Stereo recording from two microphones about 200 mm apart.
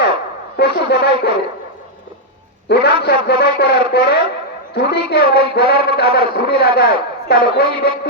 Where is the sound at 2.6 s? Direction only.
55° left (ahead or behind).